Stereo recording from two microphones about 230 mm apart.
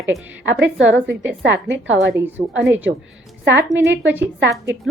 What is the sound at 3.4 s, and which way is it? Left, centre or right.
Speech, right.